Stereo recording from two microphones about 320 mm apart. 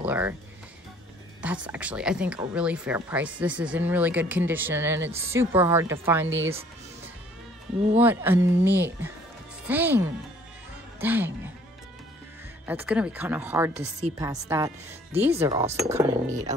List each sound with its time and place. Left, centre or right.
0.0 s speech: centre
1.4 s speech: centre
6.2 s speech: right
8.0 s speech: centre
12.6 s speech: centre
16.3 s speech: right